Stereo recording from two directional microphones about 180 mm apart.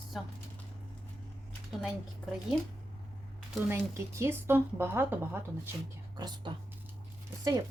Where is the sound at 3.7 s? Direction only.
15° right (ahead or behind).